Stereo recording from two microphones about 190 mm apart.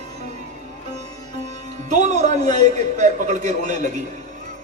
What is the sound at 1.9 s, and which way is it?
A man's voice, 40° right (ahead or behind).